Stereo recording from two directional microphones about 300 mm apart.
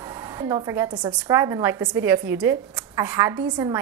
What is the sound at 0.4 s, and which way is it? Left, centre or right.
A woman's voice, centre.